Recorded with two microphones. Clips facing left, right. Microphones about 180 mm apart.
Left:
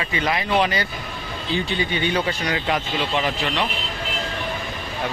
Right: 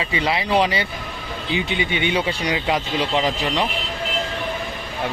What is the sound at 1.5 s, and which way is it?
Speech, 20° right (ahead or behind).